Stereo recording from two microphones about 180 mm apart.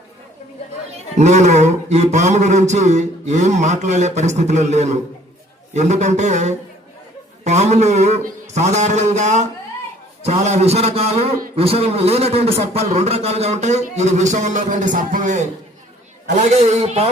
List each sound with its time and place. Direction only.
0.9 s a man's voice: 40° right (ahead or behind)